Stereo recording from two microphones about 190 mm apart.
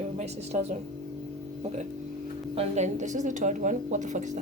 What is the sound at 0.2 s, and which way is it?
Speech, 35° right (ahead or behind).